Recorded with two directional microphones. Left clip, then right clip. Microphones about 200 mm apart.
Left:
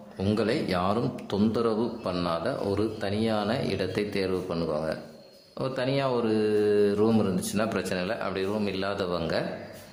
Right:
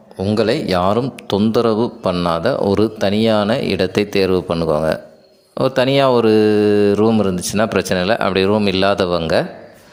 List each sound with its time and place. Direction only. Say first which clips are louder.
0.2 s a man's voice: right 10 dB; 35° right (ahead or behind)